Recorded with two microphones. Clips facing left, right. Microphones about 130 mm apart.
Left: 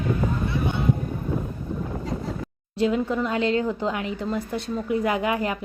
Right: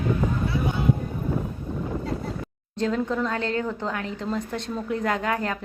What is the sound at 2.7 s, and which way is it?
Speech, 10° left (ahead or behind).